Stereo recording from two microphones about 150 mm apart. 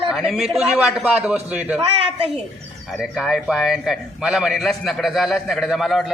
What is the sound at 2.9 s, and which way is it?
A man's voice, centre (ahead or behind).